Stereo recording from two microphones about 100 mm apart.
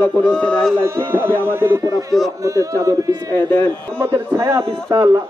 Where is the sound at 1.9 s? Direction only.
35° right (ahead or behind).